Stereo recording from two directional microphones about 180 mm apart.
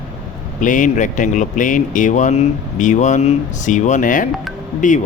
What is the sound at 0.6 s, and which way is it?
Speech, 45° left (ahead or behind).